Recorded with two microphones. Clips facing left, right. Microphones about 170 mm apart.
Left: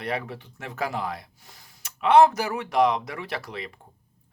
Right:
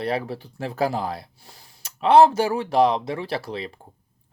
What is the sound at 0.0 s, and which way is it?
Speech, 35° right (ahead or behind).